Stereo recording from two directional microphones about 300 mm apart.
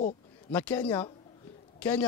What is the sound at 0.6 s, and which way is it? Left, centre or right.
Speech, centre.